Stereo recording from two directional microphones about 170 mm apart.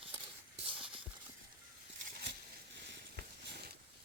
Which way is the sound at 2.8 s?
90° right.